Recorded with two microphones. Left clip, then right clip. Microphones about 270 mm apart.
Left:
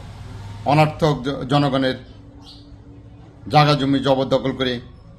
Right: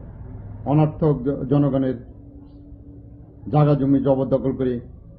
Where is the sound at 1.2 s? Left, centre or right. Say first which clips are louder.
Left 1 dB; centre.